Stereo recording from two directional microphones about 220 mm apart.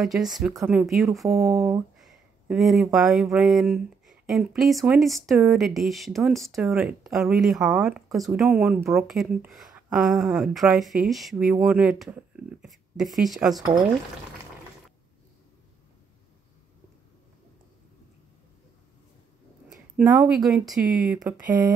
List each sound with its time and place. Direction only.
0.0 s speech: centre (ahead or behind)
1.5 s a sound: 15° right (ahead or behind)
2.0 s speech: centre (ahead or behind)
20.1 s speech: 20° right (ahead or behind)
20.4 s speech: centre (ahead or behind)
21.2 s a sound: 10° right (ahead or behind)